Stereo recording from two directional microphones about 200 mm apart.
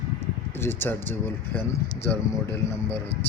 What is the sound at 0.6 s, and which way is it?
Speech, 10° left (ahead or behind).